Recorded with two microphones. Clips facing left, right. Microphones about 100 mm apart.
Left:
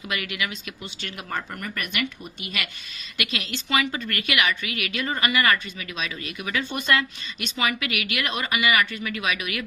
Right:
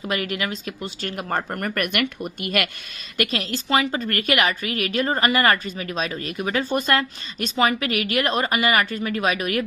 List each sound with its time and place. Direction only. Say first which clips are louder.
0.1 s speech: right 4 dB; 40° right (ahead or behind)
3.2 s a woman's voice: right 6 dB; 40° right (ahead or behind)